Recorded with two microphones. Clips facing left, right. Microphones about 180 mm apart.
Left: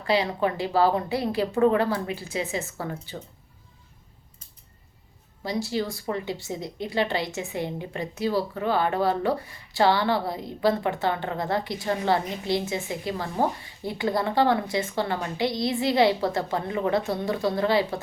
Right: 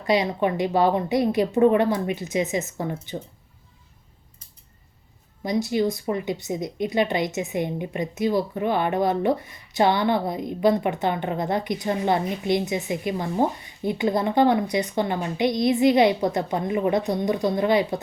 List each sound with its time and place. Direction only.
0.0 s speech: 20° right (ahead or behind)
5.4 s speech: 20° right (ahead or behind)